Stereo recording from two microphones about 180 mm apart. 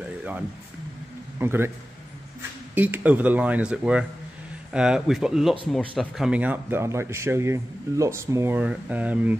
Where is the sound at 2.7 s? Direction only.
10° right (ahead or behind).